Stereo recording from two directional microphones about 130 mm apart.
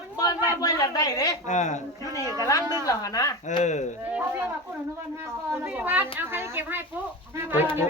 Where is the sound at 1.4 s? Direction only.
70° left (ahead or behind).